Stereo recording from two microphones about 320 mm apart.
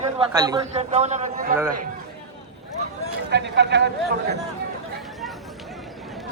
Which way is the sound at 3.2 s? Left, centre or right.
Right.